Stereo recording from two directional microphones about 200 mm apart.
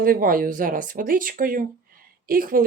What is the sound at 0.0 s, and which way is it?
Speech, 45° right (ahead or behind).